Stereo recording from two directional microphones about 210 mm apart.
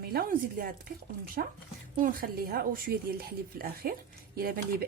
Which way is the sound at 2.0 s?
40° right (ahead or behind).